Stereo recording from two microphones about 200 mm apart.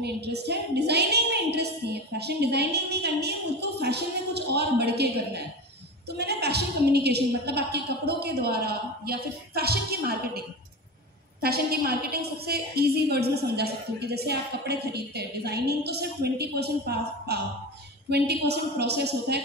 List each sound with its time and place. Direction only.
0.0 s a woman's voice: 55° right (ahead or behind)
11.4 s a woman's voice: 50° right (ahead or behind)